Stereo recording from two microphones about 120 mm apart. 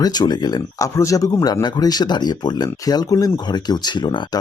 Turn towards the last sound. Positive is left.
turn(degrees=40)  # may be behind; listen again after turning